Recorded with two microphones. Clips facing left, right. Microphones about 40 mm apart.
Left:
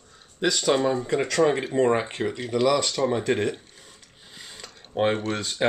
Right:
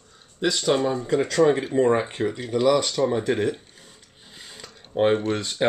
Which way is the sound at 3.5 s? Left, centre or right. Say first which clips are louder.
Right 2 dB; centre.